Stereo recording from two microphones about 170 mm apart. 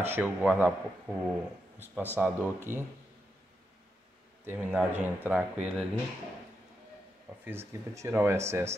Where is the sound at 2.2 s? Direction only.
15° right (ahead or behind).